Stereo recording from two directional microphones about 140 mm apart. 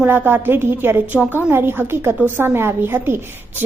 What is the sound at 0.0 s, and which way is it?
A woman's voice, 15° right (ahead or behind).